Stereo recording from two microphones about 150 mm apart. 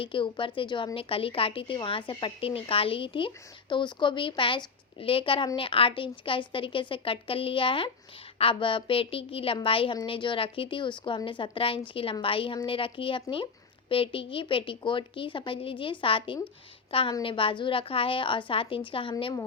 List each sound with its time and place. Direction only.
0.0 s a woman's voice: 35° left (ahead or behind)